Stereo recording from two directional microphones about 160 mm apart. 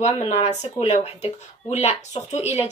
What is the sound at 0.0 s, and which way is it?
Speech, 40° left (ahead or behind).